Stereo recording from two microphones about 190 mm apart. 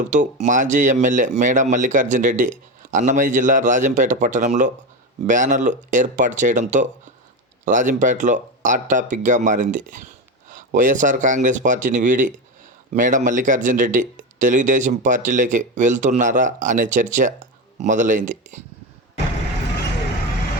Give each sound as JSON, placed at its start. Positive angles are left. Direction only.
{"t": 0.0, "sound": "speech", "side_deg": -40}